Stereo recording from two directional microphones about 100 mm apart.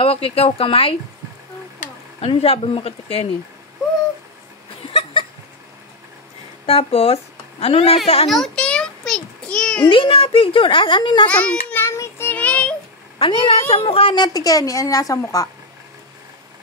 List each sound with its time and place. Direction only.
0.0 s speech: 75° left (ahead or behind)
2.2 s speech: 70° left (ahead or behind)
4.8 s a sound: 60° left (ahead or behind)
6.6 s speech: 80° left
8.5 s a sound: 10° left (ahead or behind)
9.8 s a woman's voice: 60° left (ahead or behind)
11.2 s a child's voice: 15° left (ahead or behind)
12.0 s child singing: 20° left (ahead or behind)
13.2 s speech: 60° left (ahead or behind)
14.1 s a woman's voice: 40° left (ahead or behind)